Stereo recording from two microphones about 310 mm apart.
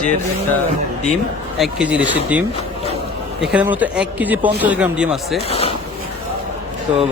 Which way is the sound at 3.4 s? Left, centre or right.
Centre.